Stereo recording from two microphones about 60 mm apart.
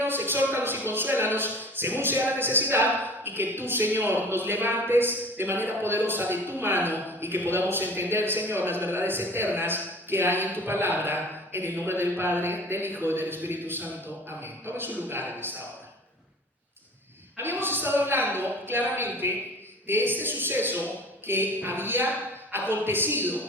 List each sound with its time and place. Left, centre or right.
0.0 s a man's voice: right
17.3 s a man's voice: right